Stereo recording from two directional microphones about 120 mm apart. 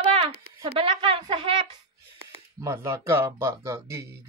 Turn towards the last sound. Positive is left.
turn(degrees=-25)  # may be behind; listen again after turning